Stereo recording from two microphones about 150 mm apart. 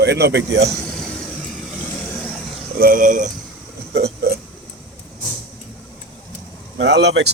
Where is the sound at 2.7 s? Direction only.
70° right (ahead or behind).